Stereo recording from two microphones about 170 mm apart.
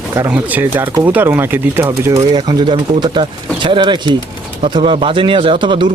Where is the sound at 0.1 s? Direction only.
15° right (ahead or behind).